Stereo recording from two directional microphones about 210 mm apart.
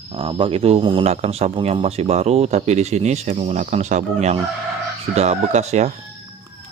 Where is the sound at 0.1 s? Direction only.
25° right (ahead or behind).